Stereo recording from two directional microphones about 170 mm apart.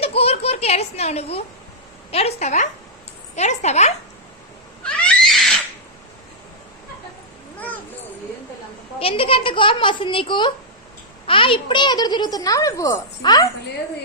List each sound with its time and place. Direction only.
0.0 s a sound: 35° left (ahead or behind)
0.6 s a child's voice: 40° left (ahead or behind)
4.8 s cat: 5° left (ahead or behind)
9.0 s a child's voice: 35° left (ahead or behind)